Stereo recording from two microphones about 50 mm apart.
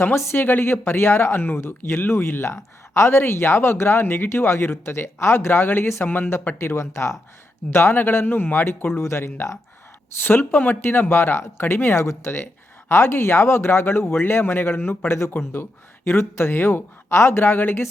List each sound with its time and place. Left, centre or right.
0.2 s speech: left
6.6 s speech: left
7.7 s speech: left
7.9 s speech: left
9.0 s speech: left
10.2 s speech: left
17.1 s speech: left